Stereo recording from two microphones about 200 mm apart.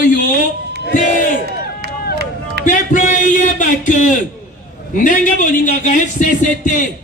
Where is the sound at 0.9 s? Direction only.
40° left (ahead or behind).